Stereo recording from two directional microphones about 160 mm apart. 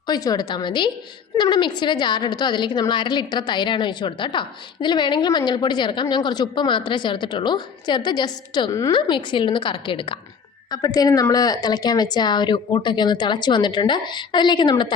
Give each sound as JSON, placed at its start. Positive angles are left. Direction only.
{"t": 0.1, "sound": "a woman's voice", "side_deg": 25}